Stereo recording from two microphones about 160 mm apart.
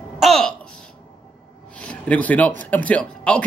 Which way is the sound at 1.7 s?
5° left (ahead or behind).